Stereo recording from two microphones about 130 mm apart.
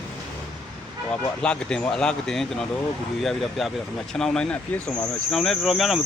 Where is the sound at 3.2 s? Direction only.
Centre (ahead or behind).